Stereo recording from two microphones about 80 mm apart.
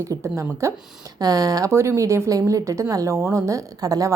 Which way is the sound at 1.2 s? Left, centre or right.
Right.